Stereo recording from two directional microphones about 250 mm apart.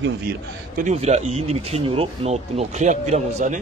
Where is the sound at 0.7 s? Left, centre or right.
Right.